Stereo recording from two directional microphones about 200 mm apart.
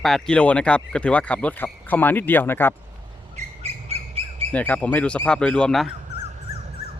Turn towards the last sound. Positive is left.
turn(degrees=5)  # may be behind; listen again after turning